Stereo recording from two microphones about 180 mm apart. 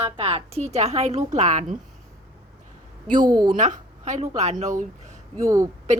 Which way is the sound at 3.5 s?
40° right (ahead or behind).